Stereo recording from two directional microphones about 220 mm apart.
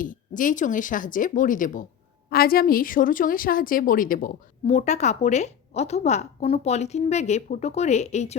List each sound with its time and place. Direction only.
0.0 s a woman's voice: 35° left (ahead or behind)